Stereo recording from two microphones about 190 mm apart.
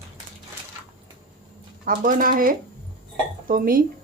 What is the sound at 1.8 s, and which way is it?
Speech, 45° right (ahead or behind).